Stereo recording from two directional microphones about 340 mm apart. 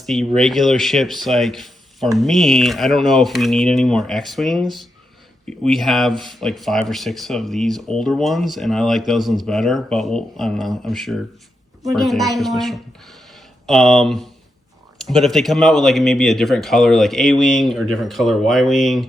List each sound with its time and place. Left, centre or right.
0.0 s speech: centre